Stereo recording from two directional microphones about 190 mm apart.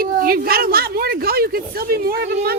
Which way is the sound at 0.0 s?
50° right (ahead or behind).